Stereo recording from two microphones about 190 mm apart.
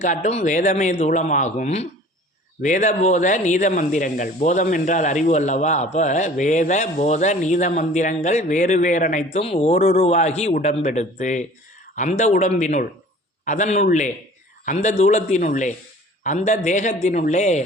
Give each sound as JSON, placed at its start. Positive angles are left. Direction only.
{"t": 0.0, "sound": "speech", "side_deg": 40}